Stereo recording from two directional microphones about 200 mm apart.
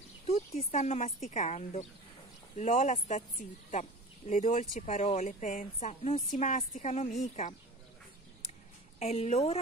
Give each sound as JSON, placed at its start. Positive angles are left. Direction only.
{"t": 0.3, "sound": "a woman's voice", "side_deg": 30}
{"t": 4.3, "sound": "a woman's voice", "side_deg": 35}
{"t": 9.0, "sound": "a woman's voice", "side_deg": 35}